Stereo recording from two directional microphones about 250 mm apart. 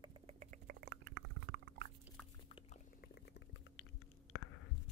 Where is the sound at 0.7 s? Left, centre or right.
Right.